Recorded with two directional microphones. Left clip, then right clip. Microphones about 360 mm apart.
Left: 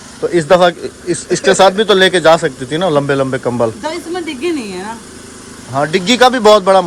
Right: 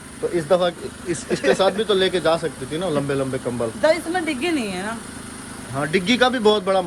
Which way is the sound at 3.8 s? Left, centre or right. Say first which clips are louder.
Right 2 dB; centre.